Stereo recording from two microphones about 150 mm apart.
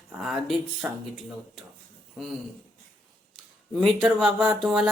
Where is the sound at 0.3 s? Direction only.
Centre (ahead or behind).